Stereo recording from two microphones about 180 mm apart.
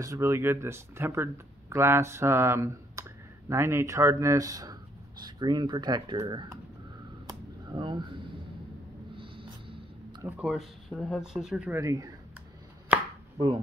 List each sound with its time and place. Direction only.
0.0 s speech: 15° right (ahead or behind)
7.2 s a sound: 25° right (ahead or behind)
10.2 s speech: 5° right (ahead or behind)
11.8 s speech: 20° right (ahead or behind)
12.9 s chopping: 10° right (ahead or behind)